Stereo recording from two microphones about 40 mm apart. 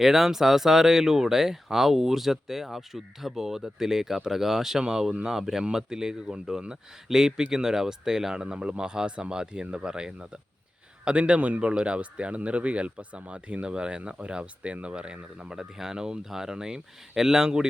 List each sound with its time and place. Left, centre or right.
0.0 s speech: centre